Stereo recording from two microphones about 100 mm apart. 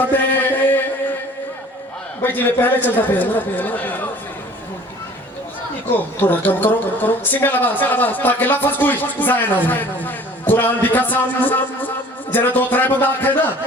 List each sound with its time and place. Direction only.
0.1 s mantra: 20° left (ahead or behind)
2.2 s speech: 20° left (ahead or behind)
5.9 s speech: 20° left (ahead or behind)